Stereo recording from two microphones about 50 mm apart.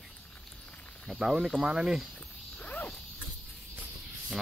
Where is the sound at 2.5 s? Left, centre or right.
Left.